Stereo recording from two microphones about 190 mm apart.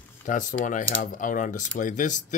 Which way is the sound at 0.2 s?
40° left (ahead or behind).